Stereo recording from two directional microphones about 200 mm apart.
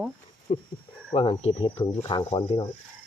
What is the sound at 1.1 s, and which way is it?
Speech, 30° left (ahead or behind).